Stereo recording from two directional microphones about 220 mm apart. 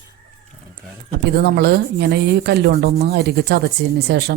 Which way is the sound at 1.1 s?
45° right (ahead or behind).